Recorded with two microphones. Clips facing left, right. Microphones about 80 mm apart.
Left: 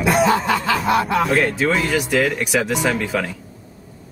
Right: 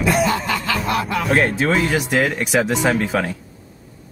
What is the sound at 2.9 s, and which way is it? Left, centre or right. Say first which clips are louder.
Speech: right 2 dB; centre.